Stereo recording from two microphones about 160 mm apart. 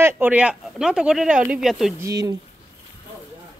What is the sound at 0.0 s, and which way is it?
Speech, 10° right (ahead or behind).